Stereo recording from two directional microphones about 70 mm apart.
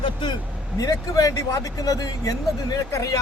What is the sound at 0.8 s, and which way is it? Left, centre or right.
Speech, left.